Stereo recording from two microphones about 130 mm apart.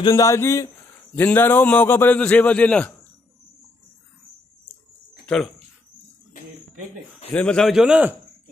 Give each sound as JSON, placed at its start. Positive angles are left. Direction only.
{"t": 0.0, "sound": "a man's voice", "side_deg": 25}
{"t": 5.2, "sound": "a sound", "side_deg": 5}
{"t": 7.3, "sound": "a man's voice", "side_deg": 5}